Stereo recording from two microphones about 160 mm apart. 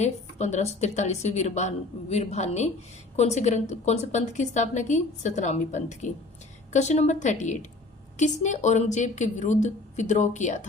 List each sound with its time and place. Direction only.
0.0 s a woman's voice: 45° left (ahead or behind)